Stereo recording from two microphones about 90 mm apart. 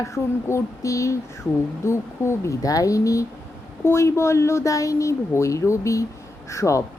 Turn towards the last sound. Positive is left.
turn(degrees=35)  # may be behind; listen again after turning